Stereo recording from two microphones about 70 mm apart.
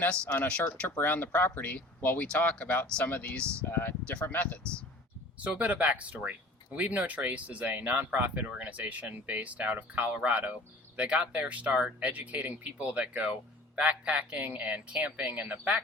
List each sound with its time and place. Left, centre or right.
0.0 s speech: centre
3.7 s speech: left
4.4 s speech: centre
5.4 s speech: right